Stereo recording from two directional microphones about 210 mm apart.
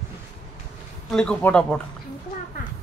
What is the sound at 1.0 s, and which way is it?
Speech, 5° left (ahead or behind).